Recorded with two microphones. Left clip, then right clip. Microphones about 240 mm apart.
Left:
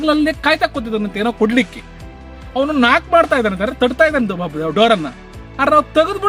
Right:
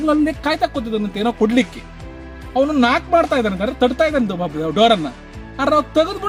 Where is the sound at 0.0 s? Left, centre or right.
Centre.